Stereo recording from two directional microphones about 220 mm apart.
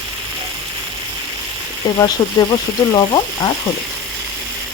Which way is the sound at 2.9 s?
20° left (ahead or behind).